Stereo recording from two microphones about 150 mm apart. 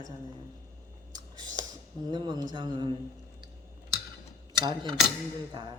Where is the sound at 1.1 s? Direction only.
25° right (ahead or behind).